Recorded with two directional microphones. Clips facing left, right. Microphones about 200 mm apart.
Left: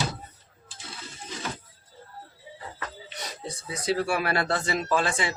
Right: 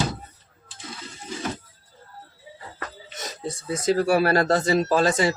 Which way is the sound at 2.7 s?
45° right (ahead or behind).